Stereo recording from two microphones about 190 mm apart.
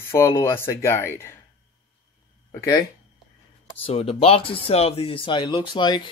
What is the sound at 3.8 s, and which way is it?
Speech, 30° left (ahead or behind).